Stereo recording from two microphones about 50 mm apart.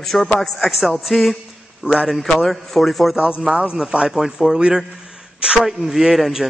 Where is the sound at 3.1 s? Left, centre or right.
Right.